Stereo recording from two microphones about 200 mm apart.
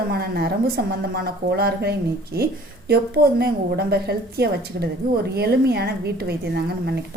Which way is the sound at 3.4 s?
50° right (ahead or behind).